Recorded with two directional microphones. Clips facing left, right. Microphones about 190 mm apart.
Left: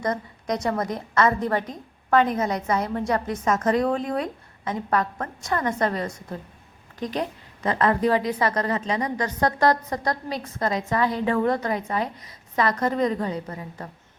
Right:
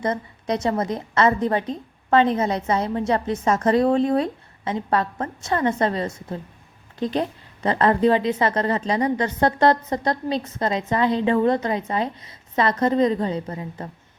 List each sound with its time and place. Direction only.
0.0 s a woman's voice: 25° right (ahead or behind)